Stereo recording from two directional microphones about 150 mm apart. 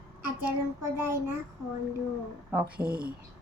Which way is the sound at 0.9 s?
15° right (ahead or behind).